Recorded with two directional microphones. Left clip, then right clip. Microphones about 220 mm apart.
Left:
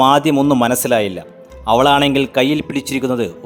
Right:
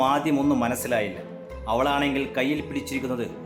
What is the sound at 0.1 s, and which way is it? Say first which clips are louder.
A man's voice: left 10 dB; 45° left (ahead or behind).